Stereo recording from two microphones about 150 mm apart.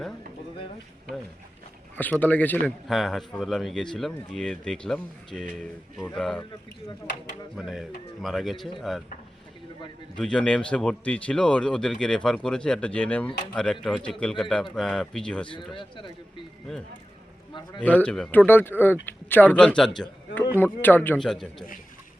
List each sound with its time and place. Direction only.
2.0 s speech: 10° left (ahead or behind)
2.6 s speech: centre (ahead or behind)
7.5 s speech: 5° right (ahead or behind)
10.2 s speech: 5° left (ahead or behind)
15.7 s a man's voice: 35° left (ahead or behind)
17.5 s a sound: 30° left (ahead or behind)
17.8 s speech: 10° left (ahead or behind)
21.2 s speech: centre (ahead or behind)